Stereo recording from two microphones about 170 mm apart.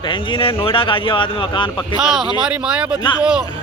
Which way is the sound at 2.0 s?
Centre (ahead or behind).